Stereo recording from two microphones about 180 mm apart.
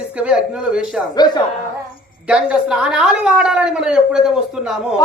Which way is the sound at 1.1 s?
25° left (ahead or behind).